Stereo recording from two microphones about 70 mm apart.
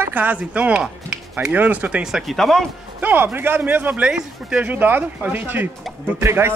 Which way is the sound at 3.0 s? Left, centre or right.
Right.